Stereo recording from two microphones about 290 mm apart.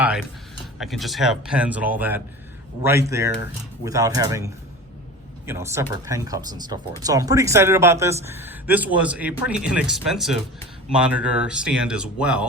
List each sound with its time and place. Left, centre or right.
0.0 s speech: centre